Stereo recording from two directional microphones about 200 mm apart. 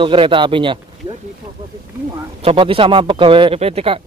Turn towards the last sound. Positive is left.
turn(degrees=-30)  # may be behind; listen again after turning